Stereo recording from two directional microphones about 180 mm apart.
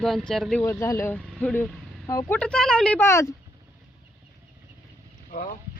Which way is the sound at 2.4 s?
5° left (ahead or behind).